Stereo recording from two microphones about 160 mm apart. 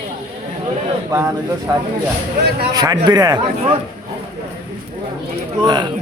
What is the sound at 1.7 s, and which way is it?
A man's voice, 20° right (ahead or behind).